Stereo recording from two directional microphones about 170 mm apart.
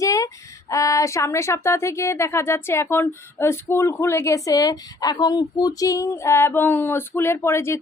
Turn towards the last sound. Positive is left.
turn(degrees=15)  # may be behind; listen again after turning